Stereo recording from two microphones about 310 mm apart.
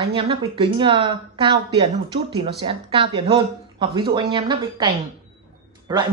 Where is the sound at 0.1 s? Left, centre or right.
Centre.